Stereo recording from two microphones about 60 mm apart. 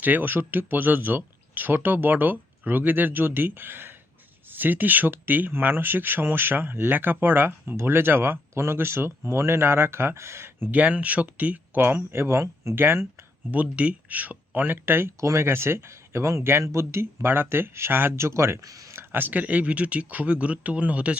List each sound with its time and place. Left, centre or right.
0.0 s speech: right
10.7 s speech: right
13.5 s speech: right
18.6 s speech: right
18.9 s speech: right